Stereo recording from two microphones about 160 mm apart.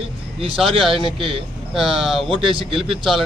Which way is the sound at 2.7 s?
Centre (ahead or behind).